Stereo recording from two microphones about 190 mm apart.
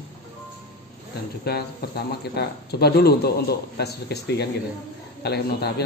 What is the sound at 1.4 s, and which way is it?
Speech, 55° left (ahead or behind).